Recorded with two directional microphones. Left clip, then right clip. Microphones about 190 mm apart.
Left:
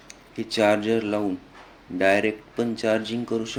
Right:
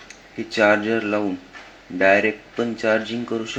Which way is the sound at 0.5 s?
20° left (ahead or behind).